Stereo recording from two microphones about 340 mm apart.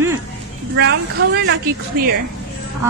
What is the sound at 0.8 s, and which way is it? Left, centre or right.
Speech, right.